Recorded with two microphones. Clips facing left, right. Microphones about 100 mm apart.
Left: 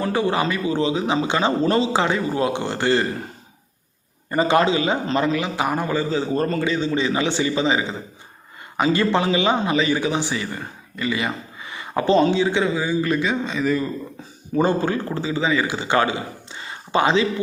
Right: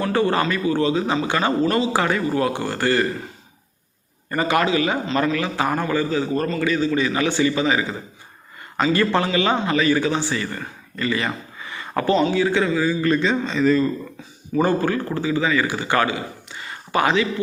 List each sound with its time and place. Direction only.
0.0 s a man's voice: 15° left (ahead or behind)
4.3 s a man's voice: 25° left (ahead or behind)
11.6 s a sound: 20° left (ahead or behind)
12.3 s a man's voice: 20° left (ahead or behind)
14.5 s a man's voice: 20° left (ahead or behind)